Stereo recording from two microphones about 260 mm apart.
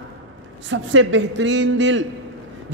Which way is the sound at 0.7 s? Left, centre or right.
Right.